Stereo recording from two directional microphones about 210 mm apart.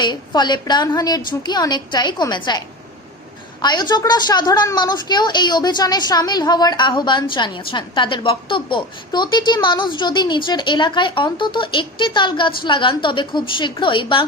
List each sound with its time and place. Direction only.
0.0 s a woman's voice: 20° left (ahead or behind)